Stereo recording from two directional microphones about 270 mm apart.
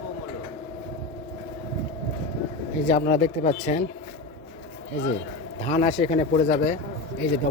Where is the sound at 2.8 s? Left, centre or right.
Left.